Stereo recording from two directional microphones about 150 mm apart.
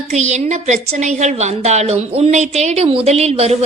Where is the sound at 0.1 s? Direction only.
50° right (ahead or behind).